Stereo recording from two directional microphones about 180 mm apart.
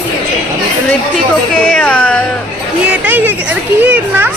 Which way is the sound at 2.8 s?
10° right (ahead or behind).